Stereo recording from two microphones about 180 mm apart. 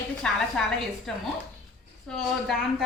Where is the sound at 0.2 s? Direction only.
5° left (ahead or behind).